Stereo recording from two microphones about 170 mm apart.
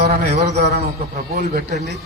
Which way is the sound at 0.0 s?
65° right (ahead or behind).